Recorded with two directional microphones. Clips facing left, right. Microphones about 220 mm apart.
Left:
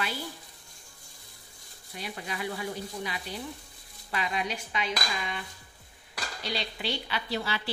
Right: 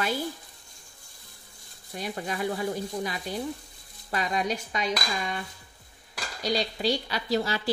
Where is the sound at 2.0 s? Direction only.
45° right (ahead or behind).